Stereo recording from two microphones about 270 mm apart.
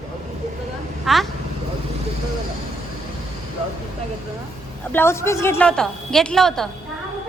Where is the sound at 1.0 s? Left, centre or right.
Centre.